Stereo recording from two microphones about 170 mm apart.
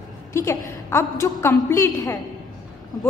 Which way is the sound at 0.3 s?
15° left (ahead or behind).